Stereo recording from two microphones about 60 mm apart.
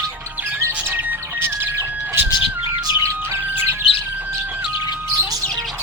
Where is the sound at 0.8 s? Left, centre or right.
Right.